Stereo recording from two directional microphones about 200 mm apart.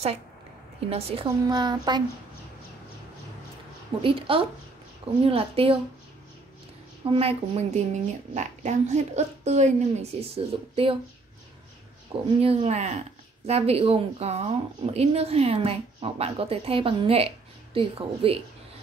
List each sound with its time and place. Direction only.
0.8 s speech: 30° right (ahead or behind)
4.0 s speech: 25° right (ahead or behind)
7.1 s speech: 30° right (ahead or behind)
12.4 s speech: 30° right (ahead or behind)